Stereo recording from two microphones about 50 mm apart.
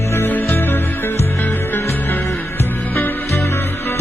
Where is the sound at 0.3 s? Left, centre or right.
Left.